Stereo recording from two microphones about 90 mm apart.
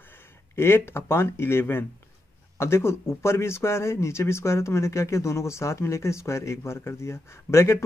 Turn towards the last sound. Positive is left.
turn(degrees=30)  # may be behind; listen again after turning